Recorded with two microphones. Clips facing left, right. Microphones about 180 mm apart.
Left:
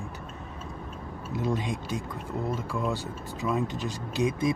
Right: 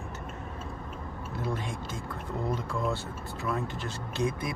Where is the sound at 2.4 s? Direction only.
5° left (ahead or behind).